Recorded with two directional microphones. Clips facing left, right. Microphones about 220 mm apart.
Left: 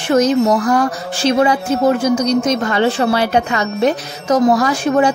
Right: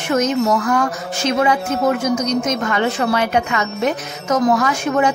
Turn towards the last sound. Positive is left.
turn(degrees=35)  # may be behind; listen again after turning